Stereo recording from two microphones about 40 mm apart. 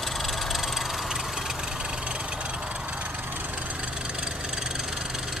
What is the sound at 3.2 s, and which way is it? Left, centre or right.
Vehicle, right.